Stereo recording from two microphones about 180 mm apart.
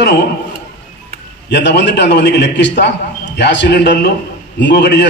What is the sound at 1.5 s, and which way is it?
A man's voice, 70° left (ahead or behind).